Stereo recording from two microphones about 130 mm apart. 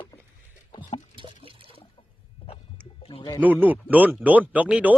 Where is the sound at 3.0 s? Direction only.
45° left (ahead or behind).